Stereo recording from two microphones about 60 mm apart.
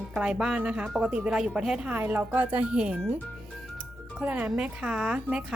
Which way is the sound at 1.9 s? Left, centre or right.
Right.